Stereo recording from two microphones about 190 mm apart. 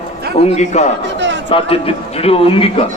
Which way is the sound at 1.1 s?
70° right (ahead or behind).